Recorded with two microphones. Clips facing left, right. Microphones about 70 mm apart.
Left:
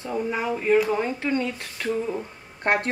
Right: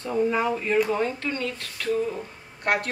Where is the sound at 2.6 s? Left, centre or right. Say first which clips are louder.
Left 2 dB; left.